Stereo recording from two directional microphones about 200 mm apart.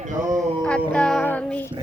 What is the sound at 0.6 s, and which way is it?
Music, 5° left (ahead or behind).